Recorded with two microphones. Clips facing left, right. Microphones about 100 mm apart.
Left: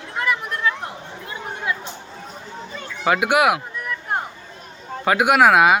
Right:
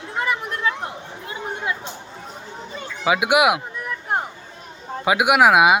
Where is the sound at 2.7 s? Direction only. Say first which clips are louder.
Left 1 dB; 5° right (ahead or behind).